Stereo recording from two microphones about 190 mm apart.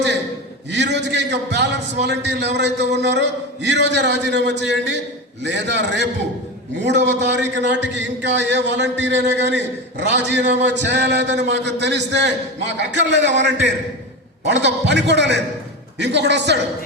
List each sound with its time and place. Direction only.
0.7 s a man's voice: 65° right (ahead or behind)